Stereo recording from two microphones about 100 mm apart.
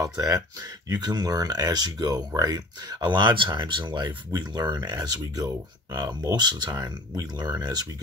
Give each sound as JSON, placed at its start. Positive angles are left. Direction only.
{"t": 0.0, "sound": "speech", "side_deg": -40}